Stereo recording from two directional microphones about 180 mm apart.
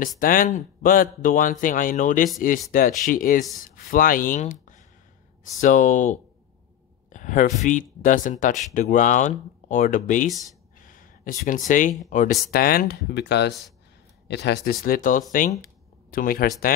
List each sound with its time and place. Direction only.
0.2 s speech: 50° left (ahead or behind)
10.8 s a sound: 50° left (ahead or behind)
12.1 s speech: 45° left (ahead or behind)